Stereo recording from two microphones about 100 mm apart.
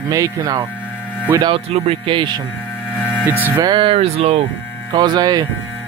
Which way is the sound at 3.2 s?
20° right (ahead or behind).